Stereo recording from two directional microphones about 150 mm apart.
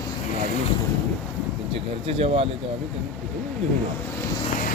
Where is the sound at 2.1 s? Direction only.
40° right (ahead or behind).